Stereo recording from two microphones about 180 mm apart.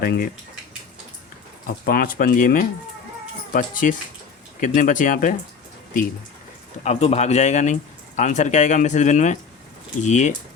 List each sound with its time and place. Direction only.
0.0 s speech: 55° left (ahead or behind)
1.8 s speech: 55° left (ahead or behind)
6.8 s speech: 35° left (ahead or behind)